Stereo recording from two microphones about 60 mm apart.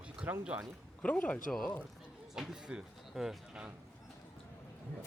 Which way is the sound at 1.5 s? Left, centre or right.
Centre.